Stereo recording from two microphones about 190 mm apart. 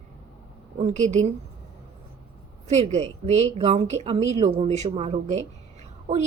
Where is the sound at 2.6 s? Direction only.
35° right (ahead or behind).